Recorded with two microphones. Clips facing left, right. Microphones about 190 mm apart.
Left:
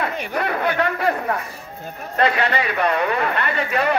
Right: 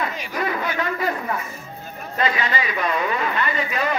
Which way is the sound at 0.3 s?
60° left (ahead or behind).